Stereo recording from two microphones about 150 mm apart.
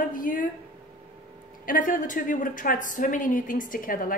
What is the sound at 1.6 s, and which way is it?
A woman's voice, 65° left (ahead or behind).